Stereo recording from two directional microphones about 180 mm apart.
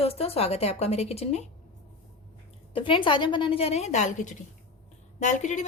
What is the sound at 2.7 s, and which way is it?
A woman's voice, 30° left (ahead or behind).